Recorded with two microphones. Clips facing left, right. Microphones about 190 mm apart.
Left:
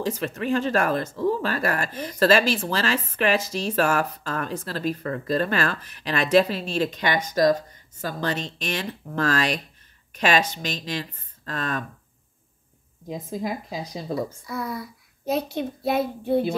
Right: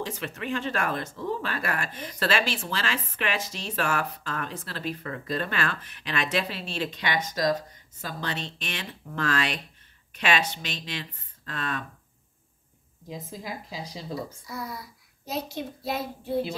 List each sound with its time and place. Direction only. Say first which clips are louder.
0.0 s speech: left 6 dB; 40° left (ahead or behind)
13.1 s a child's voice: left 8 dB; 50° left (ahead or behind)